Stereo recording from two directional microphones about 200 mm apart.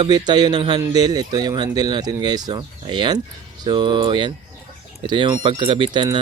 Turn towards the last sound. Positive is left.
turn(degrees=-25)  # may be behind; listen again after turning